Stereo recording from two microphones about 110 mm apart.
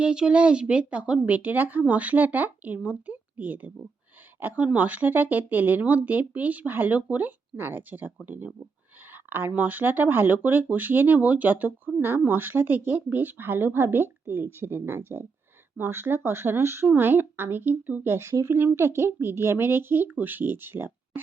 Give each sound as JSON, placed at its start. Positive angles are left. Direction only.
{"t": 0.0, "sound": "speech", "side_deg": -10}
{"t": 9.1, "sound": "a sound", "side_deg": -20}
{"t": 9.5, "sound": "speech", "side_deg": -15}